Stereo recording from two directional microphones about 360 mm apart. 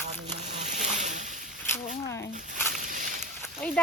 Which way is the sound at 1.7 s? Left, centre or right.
Centre.